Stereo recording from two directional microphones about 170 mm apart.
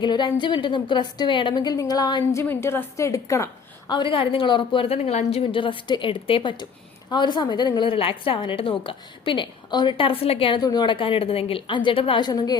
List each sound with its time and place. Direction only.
0.0 s a woman's voice: 25° left (ahead or behind)
2.4 s a woman's voice: 15° left (ahead or behind)